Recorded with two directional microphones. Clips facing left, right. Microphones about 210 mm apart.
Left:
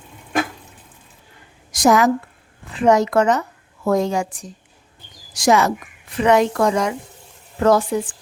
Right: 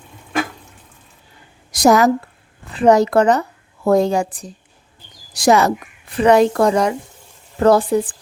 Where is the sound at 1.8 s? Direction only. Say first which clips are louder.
Right 2 dB; 40° right (ahead or behind).